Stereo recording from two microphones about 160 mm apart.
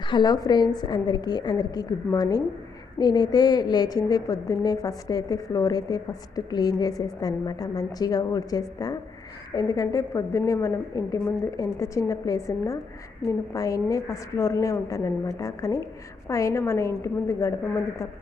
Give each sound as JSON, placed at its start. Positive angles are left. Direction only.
{"t": 0.1, "sound": "a woman's voice", "side_deg": 25}